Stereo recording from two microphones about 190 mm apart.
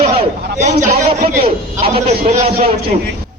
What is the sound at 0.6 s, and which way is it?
A man's voice, 40° right (ahead or behind).